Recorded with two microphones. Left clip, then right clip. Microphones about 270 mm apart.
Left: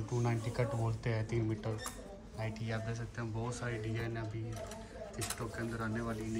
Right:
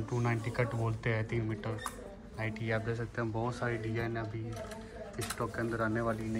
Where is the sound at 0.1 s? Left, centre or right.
Centre.